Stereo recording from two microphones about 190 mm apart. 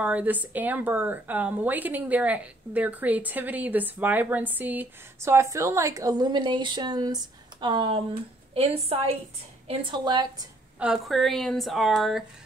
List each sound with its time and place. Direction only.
0.0 s a woman's voice: 10° right (ahead or behind); by 10.2 s 25° right (ahead or behind)
10.8 s a woman's voice: centre (ahead or behind)